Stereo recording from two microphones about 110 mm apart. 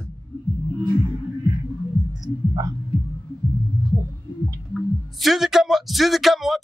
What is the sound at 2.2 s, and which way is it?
Music, 35° right (ahead or behind).